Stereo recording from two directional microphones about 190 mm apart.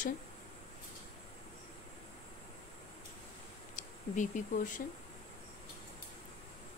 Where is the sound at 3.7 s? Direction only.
40° left (ahead or behind).